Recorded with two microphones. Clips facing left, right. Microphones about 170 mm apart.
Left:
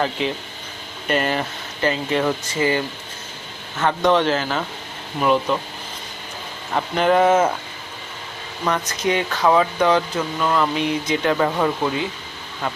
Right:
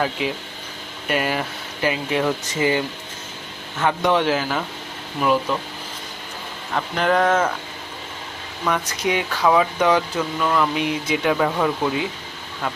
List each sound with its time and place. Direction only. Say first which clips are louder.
0.0 s speech: left 1 dB; 5° right (ahead or behind)
6.7 s speech: left 3 dB; 5° left (ahead or behind)
8.7 s speech: left 1 dB; 10° right (ahead or behind)
10.2 s speech: even; 5° left (ahead or behind)
10.8 s speech: left 1 dB; 10° right (ahead or behind)
11.4 s speech: left 1 dB; 5° left (ahead or behind)